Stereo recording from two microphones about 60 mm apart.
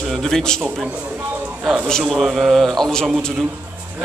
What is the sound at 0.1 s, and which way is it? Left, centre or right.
Speech, centre.